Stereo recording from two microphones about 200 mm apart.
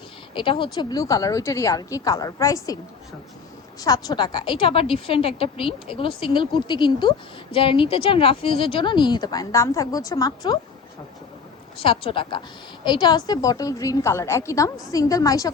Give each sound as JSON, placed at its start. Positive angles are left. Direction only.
{"t": 0.3, "sound": "a woman's voice", "side_deg": 25}
{"t": 3.8, "sound": "a woman's voice", "side_deg": 20}
{"t": 11.8, "sound": "a woman's voice", "side_deg": 25}